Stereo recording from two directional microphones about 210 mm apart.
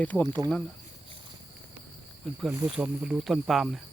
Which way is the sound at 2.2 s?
Centre (ahead or behind).